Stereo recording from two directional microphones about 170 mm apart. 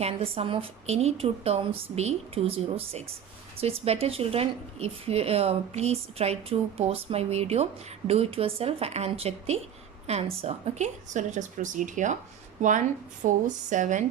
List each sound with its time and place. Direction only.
0.0 s a woman's voice: 35° right (ahead or behind)
13.2 s a woman's voice: 45° right (ahead or behind)